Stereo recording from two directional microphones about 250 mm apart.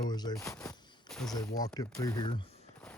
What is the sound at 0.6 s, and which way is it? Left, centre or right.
Fusillade, centre.